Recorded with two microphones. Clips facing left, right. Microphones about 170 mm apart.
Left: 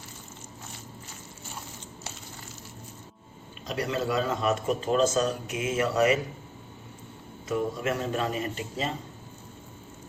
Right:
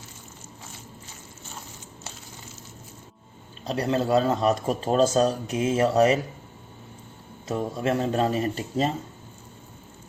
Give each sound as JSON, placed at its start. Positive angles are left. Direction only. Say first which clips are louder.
{"t": 3.7, "sound": "speech", "louder": "right 6 dB", "side_deg": -35}
{"t": 7.4, "sound": "speech", "louder": "right 2 dB", "side_deg": -35}